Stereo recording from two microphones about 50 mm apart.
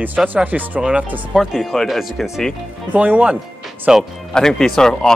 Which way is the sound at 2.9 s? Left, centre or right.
Right.